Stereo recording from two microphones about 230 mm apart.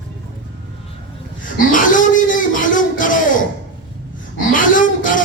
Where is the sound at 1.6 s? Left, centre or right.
Left.